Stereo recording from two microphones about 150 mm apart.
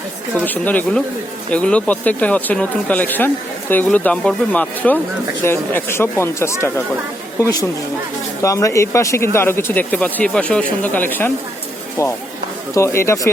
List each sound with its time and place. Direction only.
0.4 s speech: 10° left (ahead or behind)
12.7 s speech: 20° left (ahead or behind)